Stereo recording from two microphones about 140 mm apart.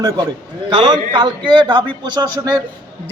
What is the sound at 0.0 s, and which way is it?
A man's voice, 30° right (ahead or behind).